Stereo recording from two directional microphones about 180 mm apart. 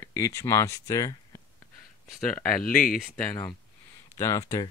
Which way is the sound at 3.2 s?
10° left (ahead or behind).